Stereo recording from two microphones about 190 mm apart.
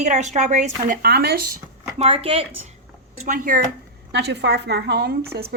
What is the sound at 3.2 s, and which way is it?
Speech, 45° right (ahead or behind).